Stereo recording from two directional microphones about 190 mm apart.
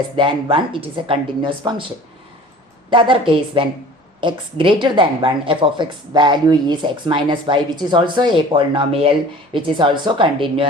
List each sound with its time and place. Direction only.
0.5 s a woman's voice: 25° right (ahead or behind)
2.9 s a woman's voice: 25° right (ahead or behind)